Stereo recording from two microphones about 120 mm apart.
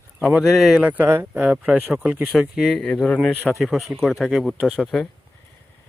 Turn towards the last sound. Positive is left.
turn(degrees=5)  # may be behind; listen again after turning